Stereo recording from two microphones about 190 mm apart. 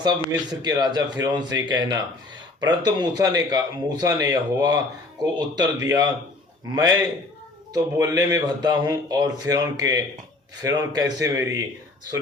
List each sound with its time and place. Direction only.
0.6 s speech: 20° right (ahead or behind)